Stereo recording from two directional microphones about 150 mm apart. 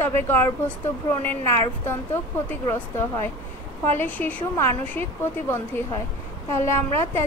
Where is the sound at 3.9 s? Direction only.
10° left (ahead or behind).